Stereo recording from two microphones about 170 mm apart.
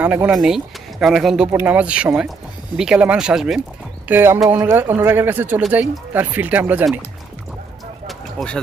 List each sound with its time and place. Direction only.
0.0 s speech: 10° right (ahead or behind)
4.1 s speech: 15° right (ahead or behind)
8.1 s a sound: centre (ahead or behind)